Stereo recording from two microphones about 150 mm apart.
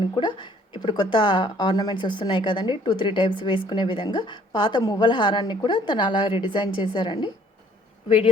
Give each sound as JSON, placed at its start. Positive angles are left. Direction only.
{"t": 0.1, "sound": "a woman's voice", "side_deg": 30}